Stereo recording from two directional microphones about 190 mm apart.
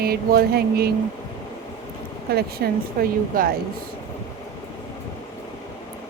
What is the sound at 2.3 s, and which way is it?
Speech, 50° right (ahead or behind).